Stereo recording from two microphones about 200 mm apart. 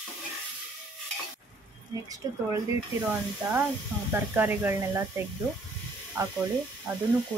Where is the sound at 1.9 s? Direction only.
15° right (ahead or behind).